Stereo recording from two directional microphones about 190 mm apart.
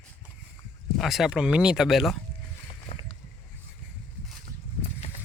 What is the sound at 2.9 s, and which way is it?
Boat, 30° left (ahead or behind).